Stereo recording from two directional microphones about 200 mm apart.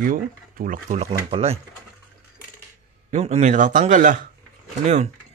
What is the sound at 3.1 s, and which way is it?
A man's voice, 35° right (ahead or behind).